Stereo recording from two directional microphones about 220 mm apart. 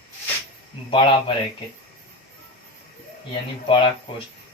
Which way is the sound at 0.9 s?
20° left (ahead or behind).